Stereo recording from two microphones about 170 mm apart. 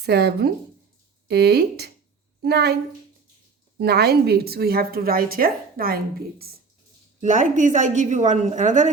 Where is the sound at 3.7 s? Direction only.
70° right (ahead or behind).